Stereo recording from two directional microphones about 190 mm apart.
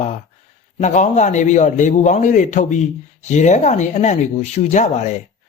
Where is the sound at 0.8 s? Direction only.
40° left (ahead or behind).